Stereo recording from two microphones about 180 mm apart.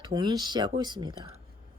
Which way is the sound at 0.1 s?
25° right (ahead or behind).